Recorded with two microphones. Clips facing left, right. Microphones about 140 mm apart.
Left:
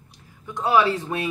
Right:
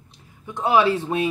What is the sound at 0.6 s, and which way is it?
Speech, 25° right (ahead or behind).